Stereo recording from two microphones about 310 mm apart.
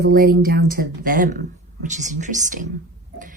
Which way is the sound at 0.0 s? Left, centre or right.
Right.